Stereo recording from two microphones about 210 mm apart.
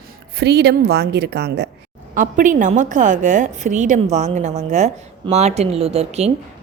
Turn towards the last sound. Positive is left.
turn(degrees=-30)  # may be behind; listen again after turning